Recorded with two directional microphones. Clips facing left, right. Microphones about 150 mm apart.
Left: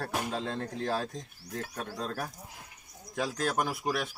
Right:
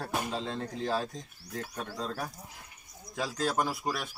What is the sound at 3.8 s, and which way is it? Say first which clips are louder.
Speech: left 2 dB; 10° left (ahead or behind).